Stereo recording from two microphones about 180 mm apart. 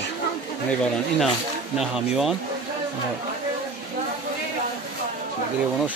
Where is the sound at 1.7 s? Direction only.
5° right (ahead or behind).